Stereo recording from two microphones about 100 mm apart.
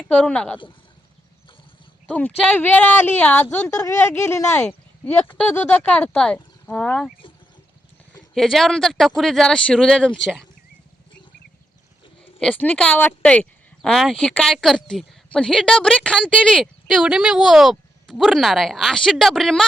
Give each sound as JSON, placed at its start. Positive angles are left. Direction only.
{"t": 0.1, "sound": "speech", "side_deg": 10}
{"t": 2.0, "sound": "speech", "side_deg": 15}
{"t": 3.7, "sound": "speech", "side_deg": 30}
{"t": 4.6, "sound": "speech", "side_deg": 15}
{"t": 8.4, "sound": "speech", "side_deg": 5}
{"t": 12.4, "sound": "speech", "side_deg": 10}
{"t": 16.8, "sound": "speech", "side_deg": -5}